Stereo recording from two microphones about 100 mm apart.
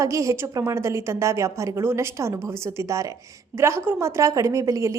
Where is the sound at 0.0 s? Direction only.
30° right (ahead or behind).